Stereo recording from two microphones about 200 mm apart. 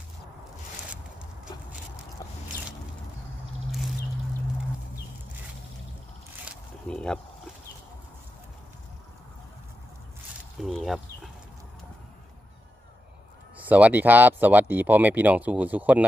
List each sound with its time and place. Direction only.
2.2 s a sound: 15° left (ahead or behind)
6.4 s squish: centre (ahead or behind)
10.6 s speech: centre (ahead or behind)
13.6 s speech: 10° right (ahead or behind)